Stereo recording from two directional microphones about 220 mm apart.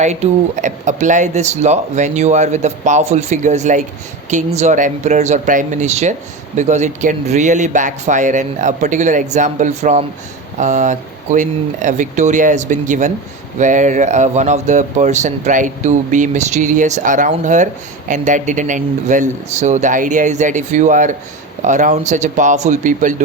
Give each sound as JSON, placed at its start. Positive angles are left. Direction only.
{"t": 0.0, "sound": "speech", "side_deg": -30}